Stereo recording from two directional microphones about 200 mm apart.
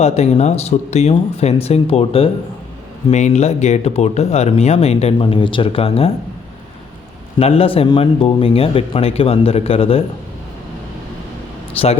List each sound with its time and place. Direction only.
0.0 s speech: 35° left (ahead or behind)
7.3 s speech: 30° left (ahead or behind)
11.8 s speech: 30° left (ahead or behind)